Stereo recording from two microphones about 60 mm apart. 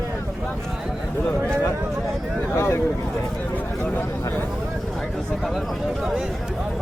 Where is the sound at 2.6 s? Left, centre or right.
Left.